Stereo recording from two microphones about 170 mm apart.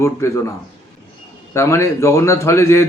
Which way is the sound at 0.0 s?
15° left (ahead or behind).